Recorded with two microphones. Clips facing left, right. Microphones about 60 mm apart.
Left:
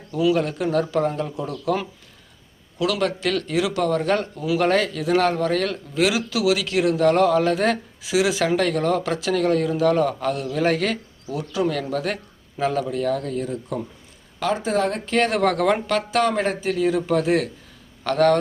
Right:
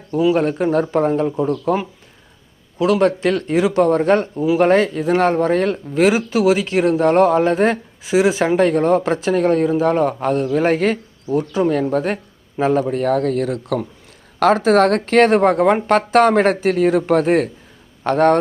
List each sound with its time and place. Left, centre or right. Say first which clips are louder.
0.2 s speech: right 4 dB; right
12.9 s speech: right 6 dB; right
15.4 s speech: right 5 dB; right
16.0 s speech: right 8 dB; right